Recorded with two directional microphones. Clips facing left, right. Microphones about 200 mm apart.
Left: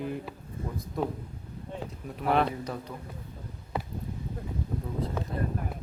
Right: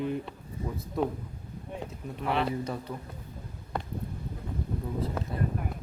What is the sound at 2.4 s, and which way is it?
Speech, 5° right (ahead or behind).